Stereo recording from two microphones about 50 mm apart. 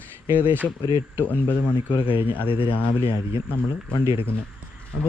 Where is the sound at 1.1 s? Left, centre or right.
Left.